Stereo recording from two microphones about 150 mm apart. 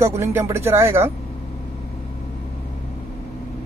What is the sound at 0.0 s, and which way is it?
Speech, 20° right (ahead or behind).